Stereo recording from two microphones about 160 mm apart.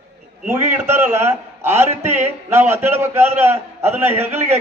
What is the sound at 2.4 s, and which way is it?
A man's voice, 15° right (ahead or behind).